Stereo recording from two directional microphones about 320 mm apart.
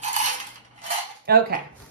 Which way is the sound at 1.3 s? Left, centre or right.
Right.